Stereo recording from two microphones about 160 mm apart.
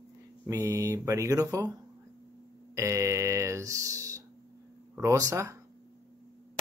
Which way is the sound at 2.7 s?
20° right (ahead or behind).